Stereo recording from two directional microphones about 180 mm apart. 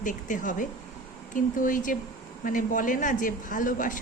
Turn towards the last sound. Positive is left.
turn(degrees=50)  # may be behind; listen again after turning